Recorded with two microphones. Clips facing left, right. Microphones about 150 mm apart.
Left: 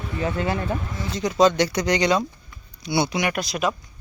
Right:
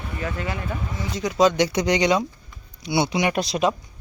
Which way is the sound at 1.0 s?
10° right (ahead or behind).